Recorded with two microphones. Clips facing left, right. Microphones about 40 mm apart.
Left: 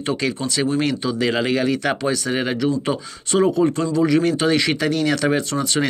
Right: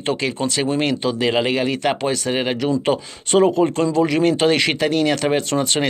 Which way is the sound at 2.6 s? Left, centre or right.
Right.